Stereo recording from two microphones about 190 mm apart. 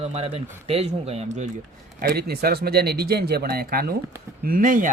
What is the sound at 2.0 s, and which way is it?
Speech, 55° right (ahead or behind).